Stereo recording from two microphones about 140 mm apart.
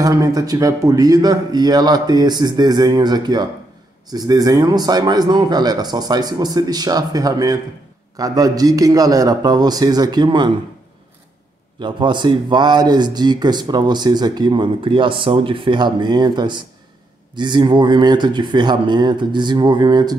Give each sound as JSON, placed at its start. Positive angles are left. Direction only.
{"t": 0.0, "sound": "a man's voice", "side_deg": -25}
{"t": 11.8, "sound": "speech", "side_deg": -35}